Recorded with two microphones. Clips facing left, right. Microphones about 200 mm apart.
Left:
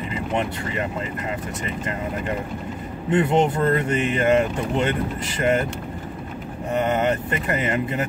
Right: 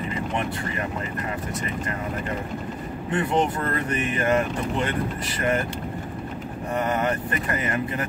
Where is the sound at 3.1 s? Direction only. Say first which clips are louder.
Left 4 dB; 20° left (ahead or behind).